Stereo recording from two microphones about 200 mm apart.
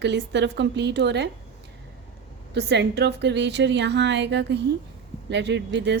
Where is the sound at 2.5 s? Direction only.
55° right (ahead or behind).